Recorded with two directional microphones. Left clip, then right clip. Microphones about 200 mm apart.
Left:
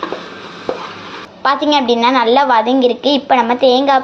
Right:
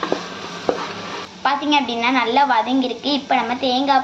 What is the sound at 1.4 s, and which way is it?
A child's voice, 40° left (ahead or behind).